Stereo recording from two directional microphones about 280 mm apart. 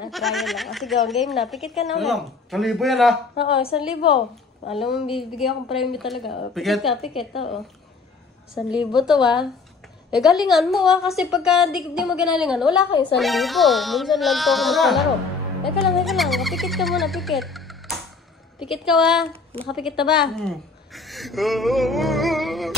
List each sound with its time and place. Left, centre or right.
0.1 s speech: centre
3.3 s a woman's voice: centre
5.1 s speech: centre
8.6 s speech: centre